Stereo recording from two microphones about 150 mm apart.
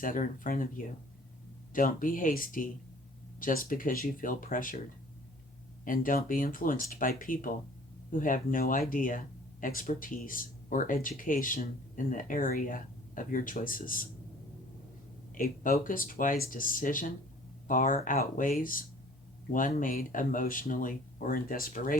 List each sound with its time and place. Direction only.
0.0 s speech: 65° left (ahead or behind)
5.8 s speech: 65° left (ahead or behind)
15.4 s speech: 65° left (ahead or behind)